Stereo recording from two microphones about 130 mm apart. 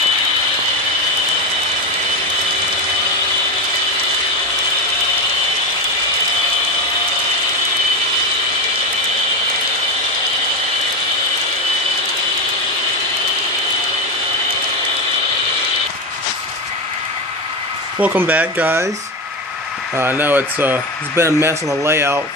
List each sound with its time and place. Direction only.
18.0 s speech: 15° right (ahead or behind)
20.0 s speech: 15° right (ahead or behind)